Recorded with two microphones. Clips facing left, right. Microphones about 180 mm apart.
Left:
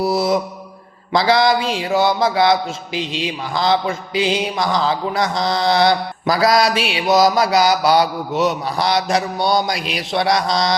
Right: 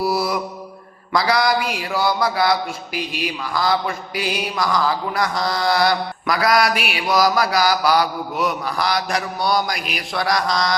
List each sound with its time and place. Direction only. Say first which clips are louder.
0.0 s mantra: left 4 dB; 20° left (ahead or behind)